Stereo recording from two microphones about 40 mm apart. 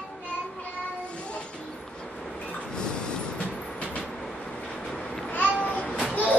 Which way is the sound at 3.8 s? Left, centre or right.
Left.